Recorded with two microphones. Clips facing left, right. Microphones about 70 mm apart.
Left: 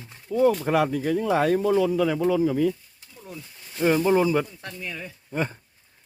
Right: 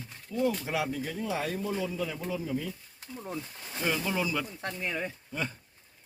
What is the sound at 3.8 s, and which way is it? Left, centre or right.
Speech, left.